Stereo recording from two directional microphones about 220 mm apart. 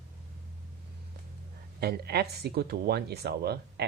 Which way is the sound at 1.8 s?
45° right (ahead or behind).